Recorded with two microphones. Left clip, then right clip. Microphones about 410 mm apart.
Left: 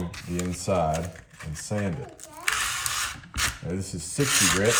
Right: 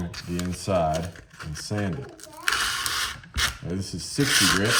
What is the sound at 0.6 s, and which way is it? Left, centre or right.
Speech, centre.